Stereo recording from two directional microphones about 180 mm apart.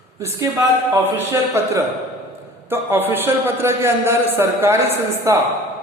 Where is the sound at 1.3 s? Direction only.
15° right (ahead or behind).